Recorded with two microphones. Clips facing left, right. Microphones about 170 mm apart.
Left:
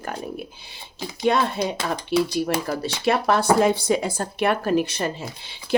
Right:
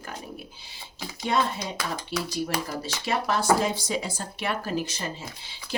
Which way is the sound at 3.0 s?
60° left (ahead or behind).